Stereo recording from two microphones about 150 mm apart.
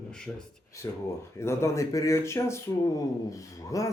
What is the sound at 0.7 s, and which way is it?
Speech, 20° left (ahead or behind).